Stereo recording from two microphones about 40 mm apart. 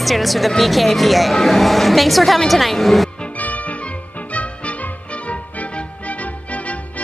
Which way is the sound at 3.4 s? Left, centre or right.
Left.